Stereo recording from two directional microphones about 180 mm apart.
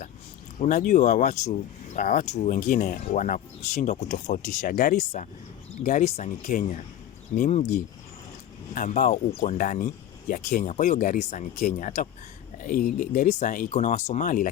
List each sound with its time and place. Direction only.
0.6 s speech: 45° left (ahead or behind)